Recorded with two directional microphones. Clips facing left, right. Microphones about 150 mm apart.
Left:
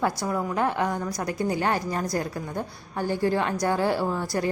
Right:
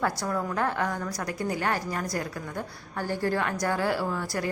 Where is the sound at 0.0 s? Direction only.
15° left (ahead or behind).